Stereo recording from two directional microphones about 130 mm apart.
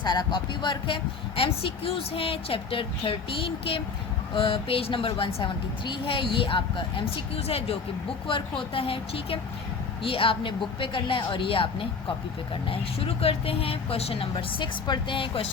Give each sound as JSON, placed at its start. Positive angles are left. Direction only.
{"t": 0.0, "sound": "a woman's voice", "side_deg": 35}